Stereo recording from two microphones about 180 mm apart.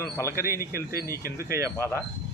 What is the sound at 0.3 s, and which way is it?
A man's voice, 15° right (ahead or behind).